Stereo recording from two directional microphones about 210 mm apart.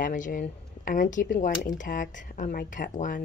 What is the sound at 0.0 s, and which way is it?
A woman's voice, 40° left (ahead or behind).